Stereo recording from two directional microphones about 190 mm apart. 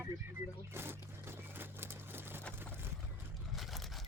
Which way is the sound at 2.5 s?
10° right (ahead or behind).